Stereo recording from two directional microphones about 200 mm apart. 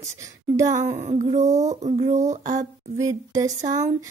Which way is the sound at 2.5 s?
15° right (ahead or behind).